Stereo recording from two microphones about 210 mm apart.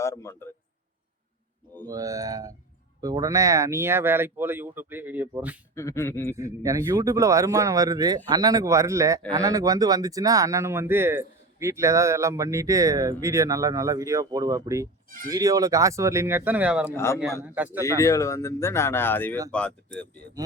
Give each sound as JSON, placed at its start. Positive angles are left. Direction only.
{"t": 0.0, "sound": "a man's voice", "side_deg": 15}
{"t": 1.9, "sound": "speech", "side_deg": -15}
{"t": 5.7, "sound": "speech", "side_deg": 15}
{"t": 6.3, "sound": "speech", "side_deg": -15}
{"t": 16.9, "sound": "speech", "side_deg": 10}
{"t": 17.4, "sound": "speech", "side_deg": -10}
{"t": 18.0, "sound": "speech", "side_deg": 15}